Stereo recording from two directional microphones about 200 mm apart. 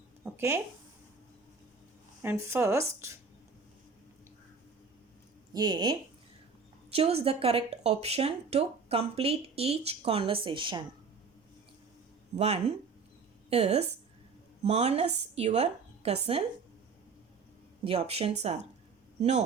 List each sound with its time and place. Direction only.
0.3 s speech: 15° right (ahead or behind)
2.2 s speech: 10° right (ahead or behind)
5.5 s speech: 20° right (ahead or behind)
12.4 s a woman's voice: 30° right (ahead or behind)
17.8 s a woman's voice: 30° right (ahead or behind)